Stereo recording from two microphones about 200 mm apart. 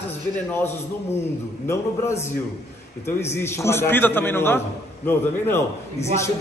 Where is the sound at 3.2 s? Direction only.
10° left (ahead or behind).